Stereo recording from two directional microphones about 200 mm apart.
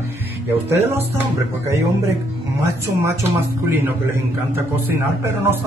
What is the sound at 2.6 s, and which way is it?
Speech, 15° right (ahead or behind).